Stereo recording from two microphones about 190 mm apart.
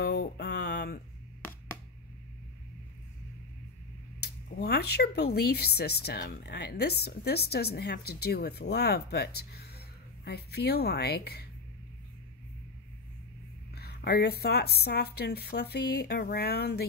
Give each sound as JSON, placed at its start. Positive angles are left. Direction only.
{"t": 0.0, "sound": "a sound", "side_deg": 60}
{"t": 4.2, "sound": "speech", "side_deg": 55}
{"t": 13.7, "sound": "speech", "side_deg": 55}